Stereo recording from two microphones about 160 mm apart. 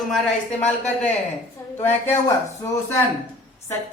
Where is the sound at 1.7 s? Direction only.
15° left (ahead or behind).